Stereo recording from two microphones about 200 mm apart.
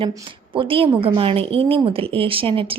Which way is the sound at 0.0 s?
20° right (ahead or behind).